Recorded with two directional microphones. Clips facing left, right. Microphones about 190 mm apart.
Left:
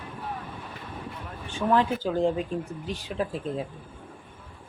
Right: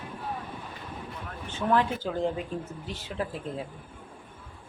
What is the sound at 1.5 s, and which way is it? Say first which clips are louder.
Speech: left 2 dB; 15° left (ahead or behind).